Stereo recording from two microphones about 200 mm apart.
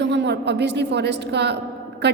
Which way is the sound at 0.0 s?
60° right (ahead or behind).